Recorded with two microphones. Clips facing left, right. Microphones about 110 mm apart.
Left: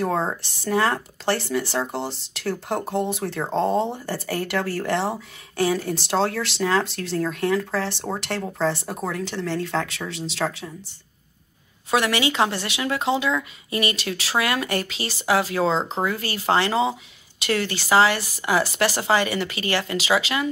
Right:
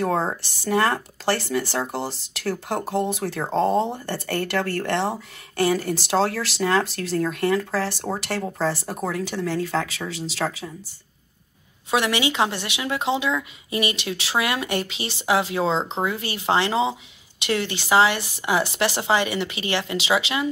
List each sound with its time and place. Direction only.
0.0 s speech: centre (ahead or behind)
11.9 s speech: 15° right (ahead or behind)